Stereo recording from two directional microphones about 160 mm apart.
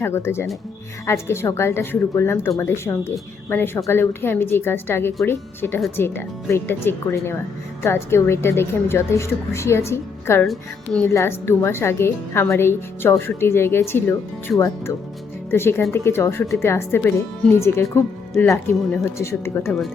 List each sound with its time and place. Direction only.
0.0 s a woman's voice: 15° left (ahead or behind)
10.4 s speech: centre (ahead or behind)
11.0 s a woman's voice: 15° left (ahead or behind)
15.5 s a woman's voice: 15° left (ahead or behind)